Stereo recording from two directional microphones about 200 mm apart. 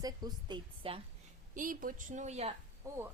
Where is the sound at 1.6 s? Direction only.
40° right (ahead or behind).